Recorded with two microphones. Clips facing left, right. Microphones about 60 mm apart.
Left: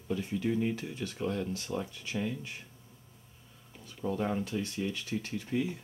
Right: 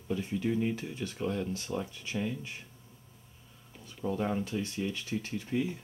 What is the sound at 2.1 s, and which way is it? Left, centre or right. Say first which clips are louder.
Speech: even; centre.